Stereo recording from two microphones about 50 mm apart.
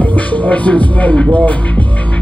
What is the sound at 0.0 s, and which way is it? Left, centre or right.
Music, left.